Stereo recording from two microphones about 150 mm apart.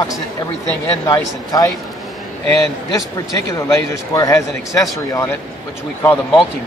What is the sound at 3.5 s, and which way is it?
A man's voice, 20° left (ahead or behind).